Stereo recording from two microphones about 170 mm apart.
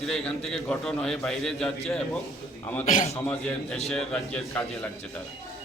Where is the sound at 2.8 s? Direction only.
45° left (ahead or behind).